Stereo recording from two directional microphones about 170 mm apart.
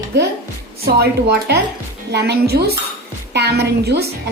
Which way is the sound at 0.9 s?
70° right (ahead or behind).